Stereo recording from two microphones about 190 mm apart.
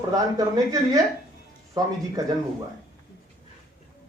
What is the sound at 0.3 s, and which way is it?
Speech, 20° right (ahead or behind).